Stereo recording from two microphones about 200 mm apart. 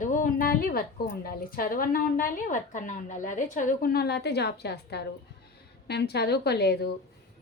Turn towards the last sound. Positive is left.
turn(degrees=55)  # may be behind; listen again after turning